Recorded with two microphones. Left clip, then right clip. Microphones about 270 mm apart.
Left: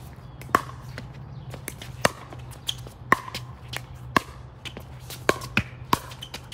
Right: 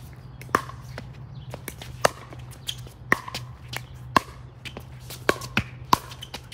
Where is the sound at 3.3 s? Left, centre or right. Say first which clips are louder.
Even; centre.